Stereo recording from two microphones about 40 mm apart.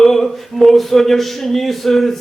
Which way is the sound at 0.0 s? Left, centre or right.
Centre.